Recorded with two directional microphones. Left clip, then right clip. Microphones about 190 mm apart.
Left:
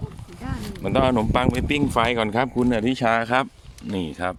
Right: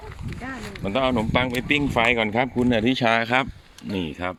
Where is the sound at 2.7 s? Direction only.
10° right (ahead or behind).